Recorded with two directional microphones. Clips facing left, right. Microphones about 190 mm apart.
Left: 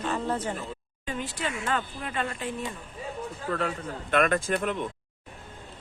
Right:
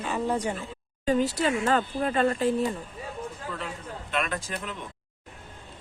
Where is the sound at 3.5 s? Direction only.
55° left (ahead or behind).